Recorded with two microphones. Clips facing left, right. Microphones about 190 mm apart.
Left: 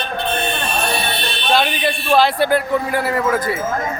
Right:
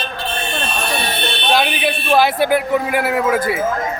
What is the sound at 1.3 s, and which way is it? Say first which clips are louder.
Music: even; 65° right (ahead or behind).